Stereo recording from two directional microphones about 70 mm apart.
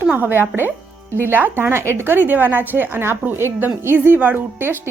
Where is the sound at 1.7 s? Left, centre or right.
Right.